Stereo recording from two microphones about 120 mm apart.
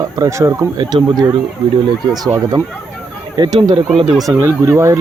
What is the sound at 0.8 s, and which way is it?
Speech, 40° right (ahead or behind).